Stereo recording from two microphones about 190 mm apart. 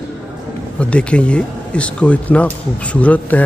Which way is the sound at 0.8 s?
5° left (ahead or behind).